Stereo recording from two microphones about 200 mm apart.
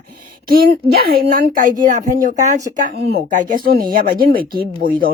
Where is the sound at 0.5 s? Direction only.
50° right (ahead or behind).